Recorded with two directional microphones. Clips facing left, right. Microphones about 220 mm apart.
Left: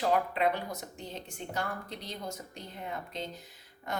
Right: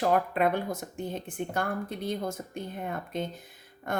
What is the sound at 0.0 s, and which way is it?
A woman's voice, 50° right (ahead or behind).